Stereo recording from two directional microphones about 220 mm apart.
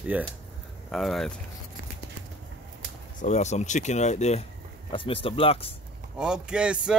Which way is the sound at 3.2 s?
30° left (ahead or behind).